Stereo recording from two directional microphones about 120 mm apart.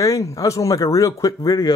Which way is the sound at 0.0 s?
25° left (ahead or behind).